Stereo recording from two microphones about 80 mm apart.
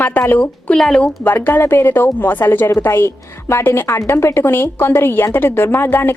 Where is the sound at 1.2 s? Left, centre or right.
Left.